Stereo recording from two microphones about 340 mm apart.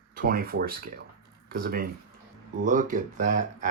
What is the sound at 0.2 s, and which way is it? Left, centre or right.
Speech, right.